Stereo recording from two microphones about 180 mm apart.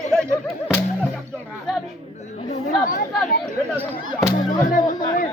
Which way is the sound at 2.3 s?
35° left (ahead or behind).